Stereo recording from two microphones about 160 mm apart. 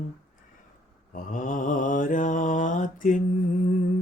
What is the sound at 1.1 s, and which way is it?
Mantra, 55° left (ahead or behind).